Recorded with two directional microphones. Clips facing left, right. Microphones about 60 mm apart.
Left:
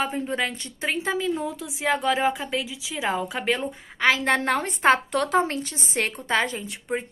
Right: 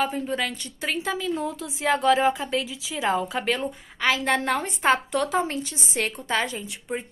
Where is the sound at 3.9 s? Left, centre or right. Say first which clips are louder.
Left 2 dB; left.